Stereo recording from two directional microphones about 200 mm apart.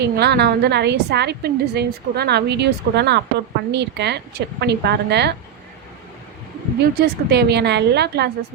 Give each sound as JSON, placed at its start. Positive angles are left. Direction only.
{"t": 0.0, "sound": "a woman's voice", "side_deg": -55}
{"t": 7.0, "sound": "a woman's voice", "side_deg": -55}